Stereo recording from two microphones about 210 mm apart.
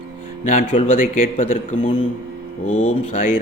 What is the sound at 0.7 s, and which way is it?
Speech, 40° left (ahead or behind).